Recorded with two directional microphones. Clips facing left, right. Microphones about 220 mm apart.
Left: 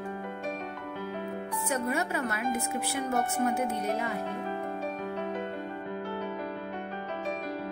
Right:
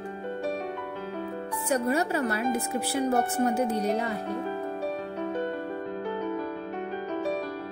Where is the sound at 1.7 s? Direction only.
35° right (ahead or behind).